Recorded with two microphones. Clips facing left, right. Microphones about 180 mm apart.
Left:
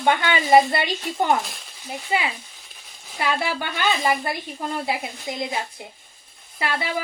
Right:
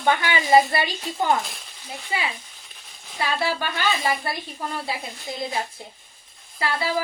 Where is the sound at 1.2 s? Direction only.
Centre (ahead or behind).